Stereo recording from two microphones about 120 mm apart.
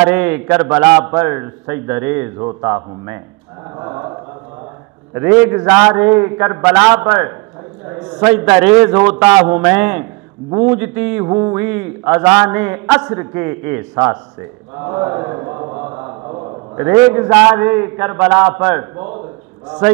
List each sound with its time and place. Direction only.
0.0 s a man's voice: 15° right (ahead or behind)
3.7 s mantra: 25° right (ahead or behind)
5.1 s a man's voice: 20° right (ahead or behind)
16.7 s a man's voice: 20° right (ahead or behind)